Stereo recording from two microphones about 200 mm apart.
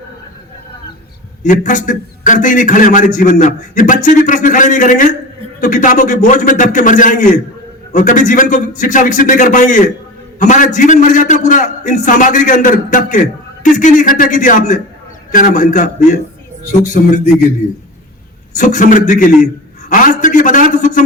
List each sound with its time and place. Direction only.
1.5 s a man's voice: 40° left (ahead or behind)
18.5 s a man's voice: 40° left (ahead or behind)